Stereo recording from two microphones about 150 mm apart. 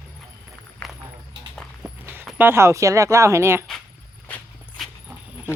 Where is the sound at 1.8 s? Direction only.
15° right (ahead or behind).